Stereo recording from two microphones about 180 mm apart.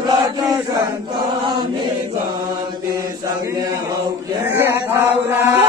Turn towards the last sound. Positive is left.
turn(degrees=-10)  # may be behind; listen again after turning